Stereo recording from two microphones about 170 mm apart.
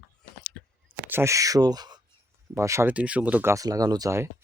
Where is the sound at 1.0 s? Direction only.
15° right (ahead or behind).